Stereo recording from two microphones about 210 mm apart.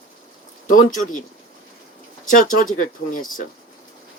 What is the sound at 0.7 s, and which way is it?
Speech, 40° left (ahead or behind).